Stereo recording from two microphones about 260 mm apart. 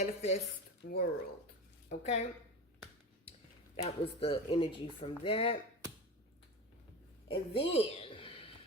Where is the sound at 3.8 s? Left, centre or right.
Left.